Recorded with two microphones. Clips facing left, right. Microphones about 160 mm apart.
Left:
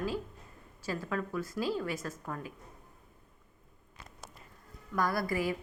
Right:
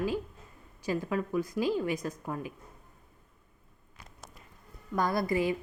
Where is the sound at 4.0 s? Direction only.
15° right (ahead or behind).